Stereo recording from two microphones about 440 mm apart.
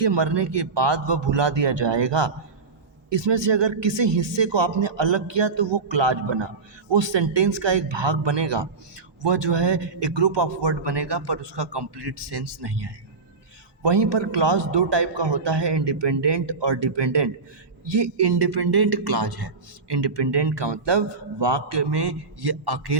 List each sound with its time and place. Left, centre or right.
0.0 s a man's voice: right